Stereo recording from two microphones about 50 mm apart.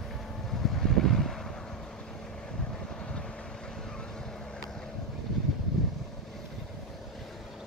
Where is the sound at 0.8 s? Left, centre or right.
Centre.